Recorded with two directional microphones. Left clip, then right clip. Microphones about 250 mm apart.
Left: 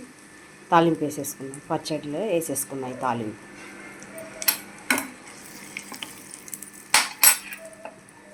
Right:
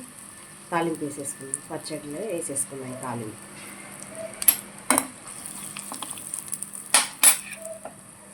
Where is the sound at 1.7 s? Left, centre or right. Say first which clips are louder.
Left 8 dB; left.